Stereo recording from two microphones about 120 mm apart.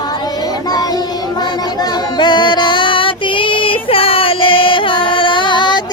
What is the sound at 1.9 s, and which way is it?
Female singing, 40° left (ahead or behind).